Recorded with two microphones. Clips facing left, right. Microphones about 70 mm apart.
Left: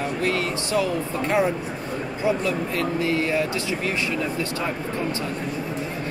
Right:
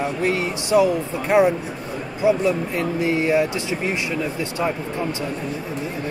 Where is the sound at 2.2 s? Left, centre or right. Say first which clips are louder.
Right 5 dB; centre.